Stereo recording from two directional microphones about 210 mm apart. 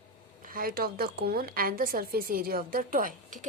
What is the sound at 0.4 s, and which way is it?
A woman's voice, 45° right (ahead or behind).